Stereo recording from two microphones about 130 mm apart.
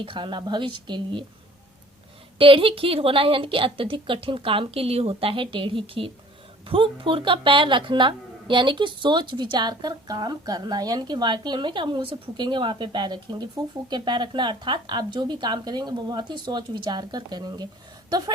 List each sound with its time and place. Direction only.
0.0 s a woman's voice: 40° right (ahead or behind)
2.4 s a woman's voice: 45° right (ahead or behind)